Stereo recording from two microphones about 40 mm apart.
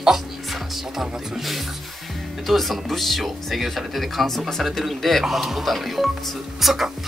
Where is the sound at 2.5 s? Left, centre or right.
Centre.